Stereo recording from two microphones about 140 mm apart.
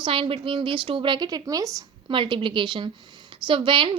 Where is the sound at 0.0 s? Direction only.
40° right (ahead or behind); by 1.9 s 25° right (ahead or behind).